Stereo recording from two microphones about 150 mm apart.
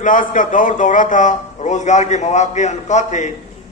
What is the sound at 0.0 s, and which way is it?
A man's voice, 60° left (ahead or behind).